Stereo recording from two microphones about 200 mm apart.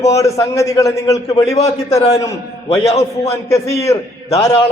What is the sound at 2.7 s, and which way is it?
Speech, 30° left (ahead or behind).